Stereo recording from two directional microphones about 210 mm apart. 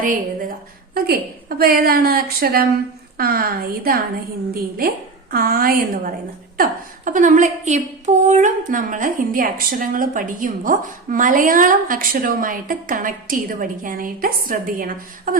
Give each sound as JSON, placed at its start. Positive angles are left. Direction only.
{"t": 0.0, "sound": "a woman's voice", "side_deg": -40}
{"t": 5.3, "sound": "a woman's voice", "side_deg": -45}